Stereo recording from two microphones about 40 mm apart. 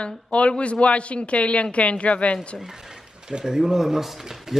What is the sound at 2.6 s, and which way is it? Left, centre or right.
Speech, centre.